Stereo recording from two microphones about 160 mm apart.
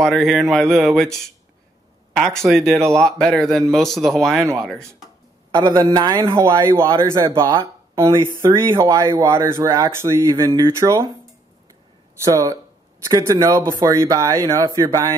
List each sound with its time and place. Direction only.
0.0 s speech: centre (ahead or behind)
5.5 s a man's voice: 25° right (ahead or behind)
12.2 s a man's voice: 20° right (ahead or behind)